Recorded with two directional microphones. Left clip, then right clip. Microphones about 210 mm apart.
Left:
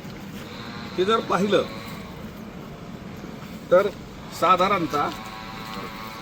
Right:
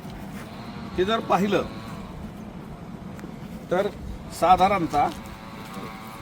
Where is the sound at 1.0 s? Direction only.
20° right (ahead or behind).